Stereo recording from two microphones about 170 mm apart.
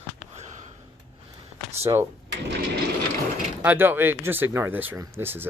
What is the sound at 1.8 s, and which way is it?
Speech, 15° right (ahead or behind).